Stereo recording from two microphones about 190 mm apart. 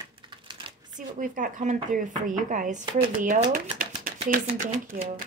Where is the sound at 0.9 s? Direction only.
45° right (ahead or behind).